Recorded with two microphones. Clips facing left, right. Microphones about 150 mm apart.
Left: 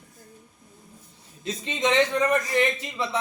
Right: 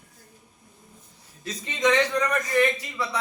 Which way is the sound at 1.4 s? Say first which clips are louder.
Right 2 dB; 25° left (ahead or behind).